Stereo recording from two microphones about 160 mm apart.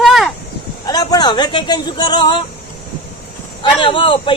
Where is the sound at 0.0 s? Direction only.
Centre (ahead or behind).